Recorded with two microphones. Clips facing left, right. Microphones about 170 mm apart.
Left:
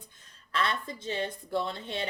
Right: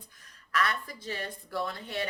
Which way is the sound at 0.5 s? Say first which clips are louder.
Even; 25° left (ahead or behind).